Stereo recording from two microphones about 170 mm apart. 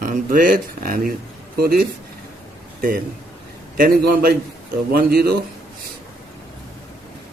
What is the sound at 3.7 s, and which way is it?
Speech, 60° right (ahead or behind).